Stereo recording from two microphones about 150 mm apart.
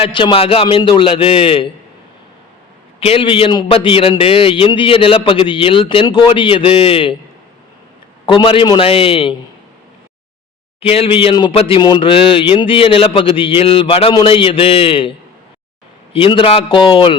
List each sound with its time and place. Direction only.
0.0 s speech: 35° left (ahead or behind)
3.0 s speech: 35° left (ahead or behind)
8.3 s speech: 35° left (ahead or behind)
10.8 s speech: 40° left (ahead or behind)
16.1 s speech: 35° left (ahead or behind)